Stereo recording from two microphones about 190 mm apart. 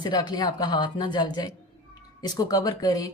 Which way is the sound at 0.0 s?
20° left (ahead or behind).